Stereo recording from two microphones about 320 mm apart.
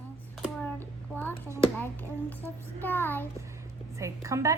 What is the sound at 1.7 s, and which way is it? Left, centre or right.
A child's voice, centre.